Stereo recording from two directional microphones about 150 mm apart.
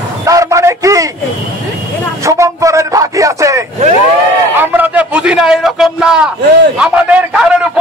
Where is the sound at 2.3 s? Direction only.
20° right (ahead or behind).